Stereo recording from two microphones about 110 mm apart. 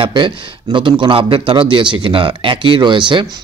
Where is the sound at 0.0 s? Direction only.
45° right (ahead or behind).